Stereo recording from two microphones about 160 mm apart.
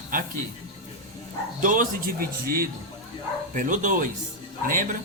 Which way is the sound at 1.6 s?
55° right (ahead or behind).